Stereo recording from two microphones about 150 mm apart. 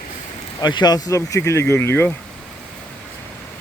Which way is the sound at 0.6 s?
30° left (ahead or behind).